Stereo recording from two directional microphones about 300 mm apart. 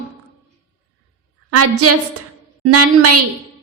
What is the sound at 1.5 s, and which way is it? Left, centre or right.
A woman's voice, right.